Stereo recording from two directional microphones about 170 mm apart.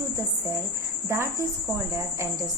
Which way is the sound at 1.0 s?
15° right (ahead or behind).